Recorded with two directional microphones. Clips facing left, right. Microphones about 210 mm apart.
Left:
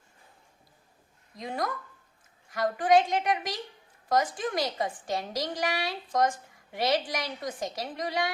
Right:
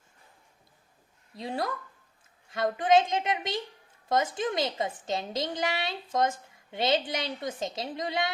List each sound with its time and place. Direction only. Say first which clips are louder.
1.4 s a woman's voice: right 1 dB; 30° right (ahead or behind)